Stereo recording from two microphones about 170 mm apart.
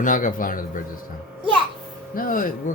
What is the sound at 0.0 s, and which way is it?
Speech, 50° left (ahead or behind).